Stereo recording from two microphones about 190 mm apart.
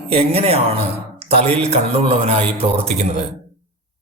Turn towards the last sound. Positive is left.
turn(degrees=-35)  # may be behind; listen again after turning